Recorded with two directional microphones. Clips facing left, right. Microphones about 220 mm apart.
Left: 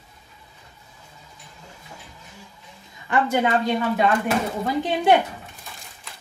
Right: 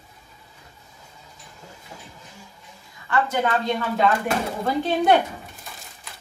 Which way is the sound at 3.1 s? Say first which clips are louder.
Left 1 dB; 15° left (ahead or behind).